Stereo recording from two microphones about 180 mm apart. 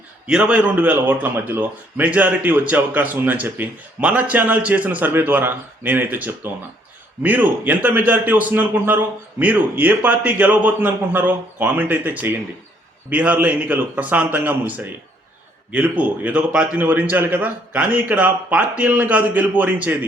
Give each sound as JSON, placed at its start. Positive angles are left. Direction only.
{"t": 0.3, "sound": "speech", "side_deg": -5}